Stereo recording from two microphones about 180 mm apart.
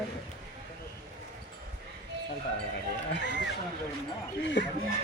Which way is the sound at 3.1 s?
75° left (ahead or behind).